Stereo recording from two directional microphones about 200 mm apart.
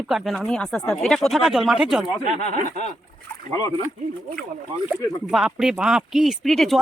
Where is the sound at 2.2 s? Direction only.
45° right (ahead or behind).